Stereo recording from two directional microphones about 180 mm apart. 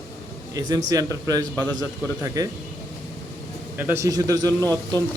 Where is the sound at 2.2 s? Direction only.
20° right (ahead or behind).